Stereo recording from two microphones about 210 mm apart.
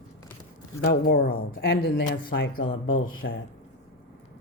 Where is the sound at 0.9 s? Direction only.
45° left (ahead or behind).